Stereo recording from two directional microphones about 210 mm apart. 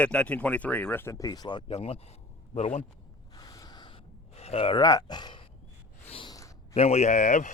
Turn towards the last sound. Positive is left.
turn(degrees=35)  # may be behind; listen again after turning